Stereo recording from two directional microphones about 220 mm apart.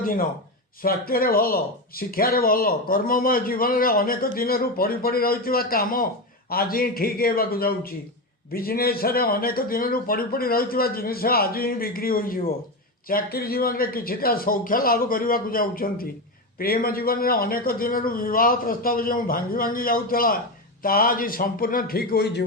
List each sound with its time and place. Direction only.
0.0 s a man's voice: 40° left (ahead or behind)